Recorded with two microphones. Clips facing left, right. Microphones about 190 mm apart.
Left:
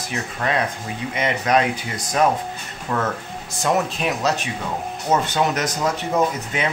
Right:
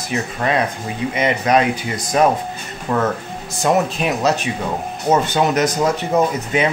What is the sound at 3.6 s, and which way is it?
Speech, 10° right (ahead or behind).